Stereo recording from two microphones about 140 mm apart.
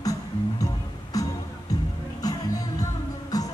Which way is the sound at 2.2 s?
25° left (ahead or behind).